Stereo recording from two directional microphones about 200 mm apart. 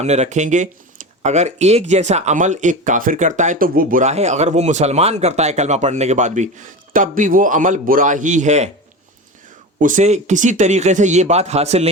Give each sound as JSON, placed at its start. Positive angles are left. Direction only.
{"t": 0.0, "sound": "speech", "side_deg": -35}
{"t": 9.7, "sound": "speech", "side_deg": -40}